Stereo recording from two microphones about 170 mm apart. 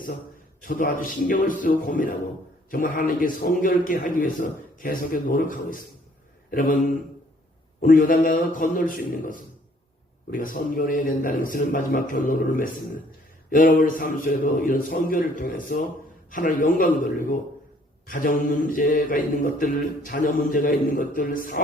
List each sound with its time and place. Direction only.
0.6 s mantra: 55° left (ahead or behind)
7.8 s mantra: 55° left (ahead or behind)